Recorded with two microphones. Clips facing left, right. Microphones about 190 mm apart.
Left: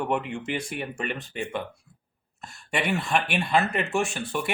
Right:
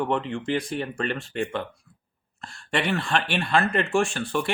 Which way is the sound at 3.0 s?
5° left (ahead or behind).